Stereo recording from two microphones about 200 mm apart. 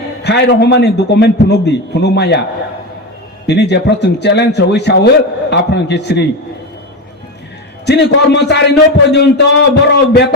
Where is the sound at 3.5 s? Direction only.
60° left (ahead or behind).